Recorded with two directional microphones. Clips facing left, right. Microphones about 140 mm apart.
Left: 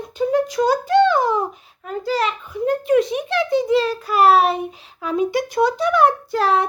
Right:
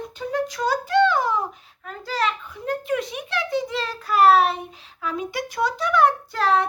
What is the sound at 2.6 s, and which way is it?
A child's voice, 20° left (ahead or behind).